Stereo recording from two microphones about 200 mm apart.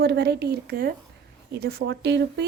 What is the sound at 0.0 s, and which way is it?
A woman's voice, 55° right (ahead or behind).